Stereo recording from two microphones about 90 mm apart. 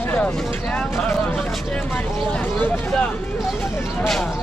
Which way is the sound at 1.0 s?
15° left (ahead or behind).